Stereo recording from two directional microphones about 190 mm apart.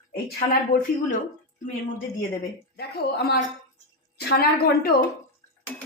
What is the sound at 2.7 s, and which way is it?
Speech, 55° left (ahead or behind).